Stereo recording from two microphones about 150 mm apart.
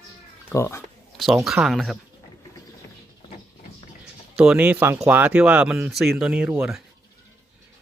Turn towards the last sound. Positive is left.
turn(degrees=-10)  # may be behind; listen again after turning